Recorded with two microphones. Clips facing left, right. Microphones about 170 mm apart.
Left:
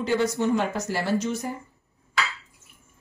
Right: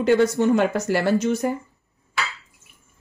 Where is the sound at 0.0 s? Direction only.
60° right (ahead or behind).